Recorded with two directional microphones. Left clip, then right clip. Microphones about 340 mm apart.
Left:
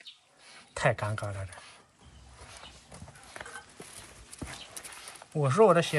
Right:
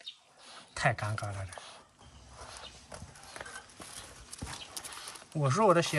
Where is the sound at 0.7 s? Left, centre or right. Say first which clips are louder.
Left 3 dB; centre.